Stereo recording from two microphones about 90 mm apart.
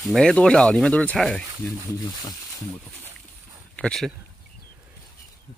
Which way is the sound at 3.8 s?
5° left (ahead or behind).